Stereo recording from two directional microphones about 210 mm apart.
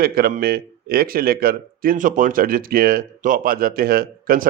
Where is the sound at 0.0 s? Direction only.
45° right (ahead or behind).